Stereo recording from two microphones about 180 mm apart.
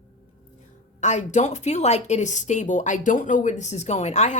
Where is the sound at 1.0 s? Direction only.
40° left (ahead or behind).